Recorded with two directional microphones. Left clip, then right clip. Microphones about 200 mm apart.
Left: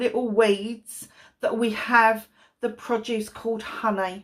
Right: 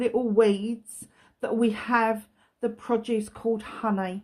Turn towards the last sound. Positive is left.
turn(degrees=-50)  # may be behind; listen again after turning